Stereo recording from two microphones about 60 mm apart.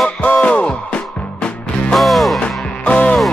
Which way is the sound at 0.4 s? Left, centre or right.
Centre.